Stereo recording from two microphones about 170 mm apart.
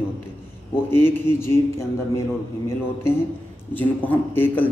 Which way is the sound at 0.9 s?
15° left (ahead or behind).